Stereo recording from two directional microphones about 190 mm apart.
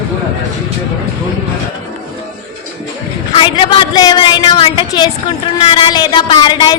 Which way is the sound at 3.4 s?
30° left (ahead or behind).